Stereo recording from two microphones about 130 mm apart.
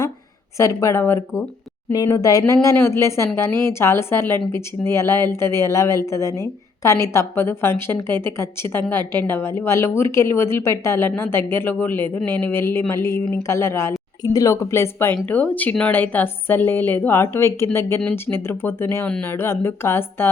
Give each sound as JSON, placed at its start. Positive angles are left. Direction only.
{"t": 0.5, "sound": "a woman's voice", "side_deg": 25}